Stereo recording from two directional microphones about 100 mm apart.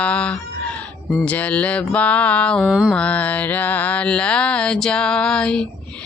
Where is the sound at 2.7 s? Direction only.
5° right (ahead or behind).